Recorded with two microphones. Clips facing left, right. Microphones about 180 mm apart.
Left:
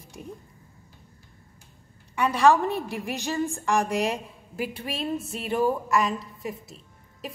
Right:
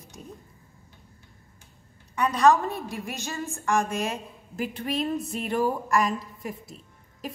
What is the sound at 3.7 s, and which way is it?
A woman's voice, 15° left (ahead or behind).